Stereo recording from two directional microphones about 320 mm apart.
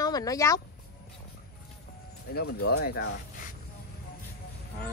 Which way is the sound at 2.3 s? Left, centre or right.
Left.